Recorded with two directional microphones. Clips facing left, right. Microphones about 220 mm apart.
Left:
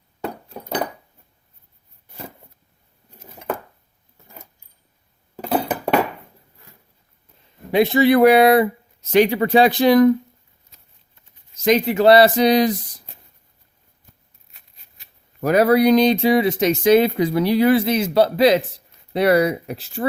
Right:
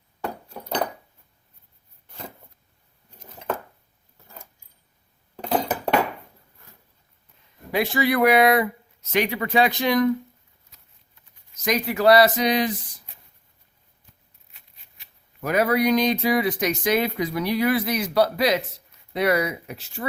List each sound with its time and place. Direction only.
3.2 s a sound: 10° left (ahead or behind)
5.4 s dishes: 10° left (ahead or behind)
7.7 s speech: 25° left (ahead or behind)
11.5 s speech: 25° left (ahead or behind)
14.9 s speech: 40° left (ahead or behind)